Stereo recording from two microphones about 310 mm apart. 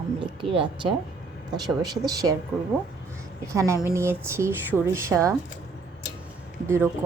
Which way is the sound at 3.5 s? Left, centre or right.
Centre.